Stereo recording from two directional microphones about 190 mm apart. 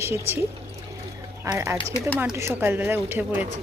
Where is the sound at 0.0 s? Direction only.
10° right (ahead or behind).